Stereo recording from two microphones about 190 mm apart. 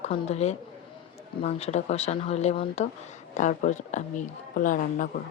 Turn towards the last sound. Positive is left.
turn(degrees=45)  # may be behind; listen again after turning